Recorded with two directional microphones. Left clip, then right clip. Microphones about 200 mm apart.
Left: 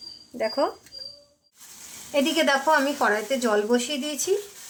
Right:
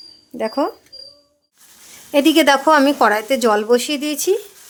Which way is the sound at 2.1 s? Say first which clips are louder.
Right 9 dB; 60° right (ahead or behind).